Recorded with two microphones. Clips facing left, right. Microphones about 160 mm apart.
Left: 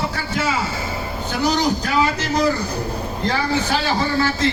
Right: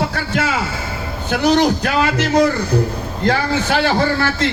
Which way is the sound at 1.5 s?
60° right (ahead or behind).